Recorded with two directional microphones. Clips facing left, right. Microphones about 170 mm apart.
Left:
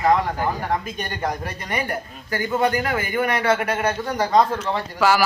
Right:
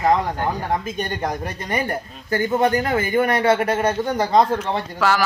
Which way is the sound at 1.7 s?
25° right (ahead or behind).